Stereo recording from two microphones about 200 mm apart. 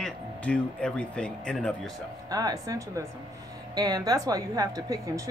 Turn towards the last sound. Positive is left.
turn(degrees=-15)  # may be behind; listen again after turning